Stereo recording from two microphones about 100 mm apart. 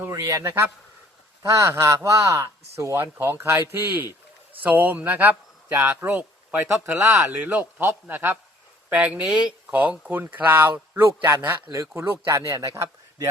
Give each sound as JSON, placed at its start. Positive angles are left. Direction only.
{"t": 0.1, "sound": "speech", "side_deg": -30}